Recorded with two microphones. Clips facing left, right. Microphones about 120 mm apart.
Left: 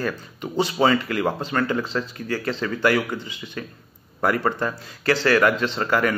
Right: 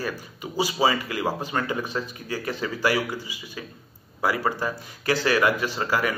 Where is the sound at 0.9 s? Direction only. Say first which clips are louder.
Left 6 dB; 55° left (ahead or behind).